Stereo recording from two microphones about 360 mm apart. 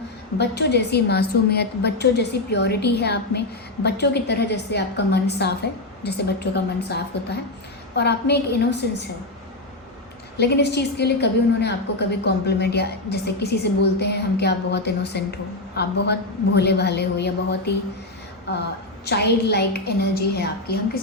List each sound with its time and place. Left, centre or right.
0.3 s a woman's voice: left
10.3 s a woman's voice: left